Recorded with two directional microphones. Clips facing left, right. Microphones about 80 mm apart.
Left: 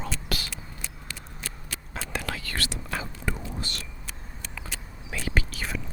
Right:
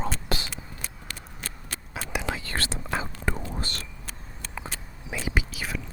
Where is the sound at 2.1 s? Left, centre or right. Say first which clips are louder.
Right 3 dB; centre.